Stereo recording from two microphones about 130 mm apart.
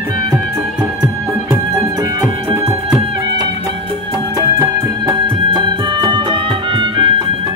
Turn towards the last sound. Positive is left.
turn(degrees=-40)  # may be behind; listen again after turning